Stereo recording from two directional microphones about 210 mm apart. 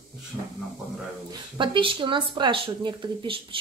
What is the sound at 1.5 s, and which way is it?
Speech, 25° right (ahead or behind).